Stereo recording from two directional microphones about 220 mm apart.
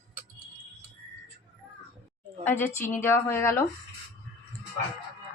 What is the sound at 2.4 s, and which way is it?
A woman's voice, 10° left (ahead or behind).